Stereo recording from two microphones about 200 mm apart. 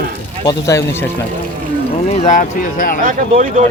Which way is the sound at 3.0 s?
40° right (ahead or behind).